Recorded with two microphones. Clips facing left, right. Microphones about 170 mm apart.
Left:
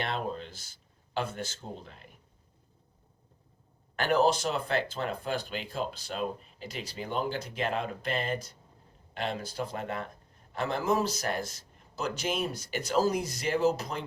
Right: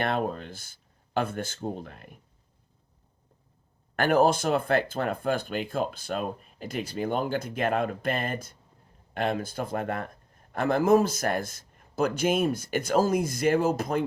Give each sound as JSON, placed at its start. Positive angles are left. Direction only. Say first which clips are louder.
{"t": 0.0, "sound": "speech", "louder": "right 5 dB", "side_deg": -55}
{"t": 3.9, "sound": "speech", "louder": "right 4 dB", "side_deg": -50}